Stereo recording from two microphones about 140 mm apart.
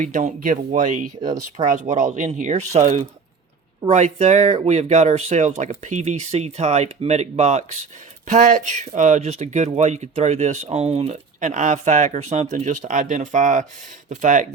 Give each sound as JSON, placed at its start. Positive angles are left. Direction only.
{"t": 0.0, "sound": "speech", "side_deg": -65}
{"t": 8.3, "sound": "speech", "side_deg": -65}